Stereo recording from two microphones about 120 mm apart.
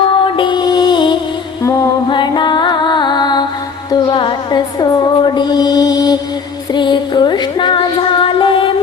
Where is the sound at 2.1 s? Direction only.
40° left (ahead or behind).